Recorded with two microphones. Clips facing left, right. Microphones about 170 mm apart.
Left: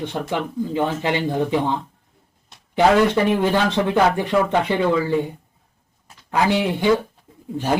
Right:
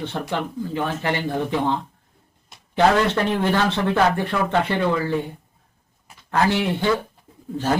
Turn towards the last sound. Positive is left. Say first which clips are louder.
# left 1 dB
turn(degrees=15)  # may be behind; listen again after turning